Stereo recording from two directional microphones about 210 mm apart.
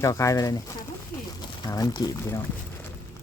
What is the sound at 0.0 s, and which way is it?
Speech, 15° left (ahead or behind).